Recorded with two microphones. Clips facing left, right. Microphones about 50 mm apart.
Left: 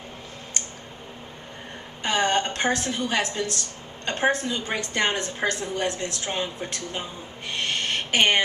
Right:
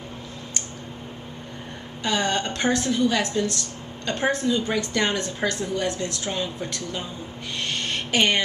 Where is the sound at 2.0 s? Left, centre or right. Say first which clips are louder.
Left 1 dB; left.